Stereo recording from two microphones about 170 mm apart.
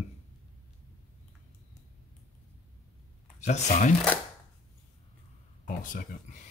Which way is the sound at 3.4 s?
45° left (ahead or behind).